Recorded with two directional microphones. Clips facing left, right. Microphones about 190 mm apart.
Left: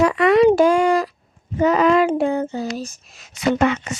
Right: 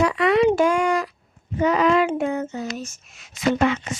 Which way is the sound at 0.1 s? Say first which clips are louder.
Left 4 dB; 50° left (ahead or behind).